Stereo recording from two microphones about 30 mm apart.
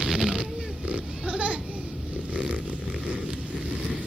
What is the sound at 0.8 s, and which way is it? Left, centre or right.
Goat, right.